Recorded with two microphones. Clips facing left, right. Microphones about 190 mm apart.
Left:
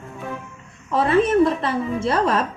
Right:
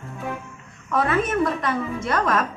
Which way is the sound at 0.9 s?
30° left (ahead or behind).